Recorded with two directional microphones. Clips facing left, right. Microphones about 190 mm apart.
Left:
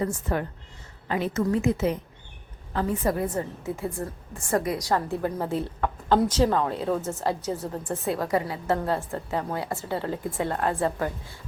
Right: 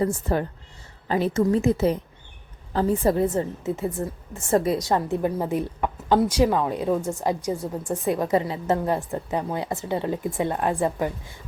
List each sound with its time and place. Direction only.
0.0 s a woman's voice: 30° right (ahead or behind); by 11.3 s 15° right (ahead or behind)